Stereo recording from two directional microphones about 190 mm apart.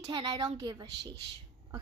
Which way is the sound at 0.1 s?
20° right (ahead or behind).